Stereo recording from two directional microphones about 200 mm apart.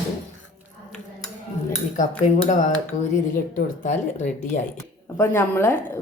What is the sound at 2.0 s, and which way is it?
Speech, 35° left (ahead or behind).